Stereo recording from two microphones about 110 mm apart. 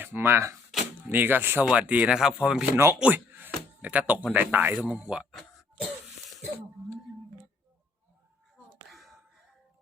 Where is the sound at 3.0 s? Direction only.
15° right (ahead or behind).